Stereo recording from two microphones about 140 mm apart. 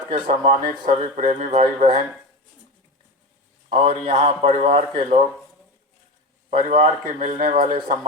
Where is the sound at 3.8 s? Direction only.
45° right (ahead or behind).